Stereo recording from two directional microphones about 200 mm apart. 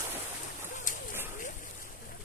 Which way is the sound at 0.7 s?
40° left (ahead or behind).